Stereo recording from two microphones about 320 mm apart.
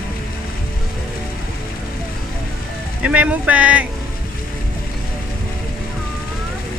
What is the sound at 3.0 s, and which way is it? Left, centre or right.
Speech, centre.